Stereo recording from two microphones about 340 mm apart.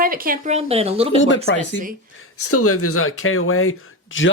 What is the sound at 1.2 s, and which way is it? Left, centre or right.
Speech, left.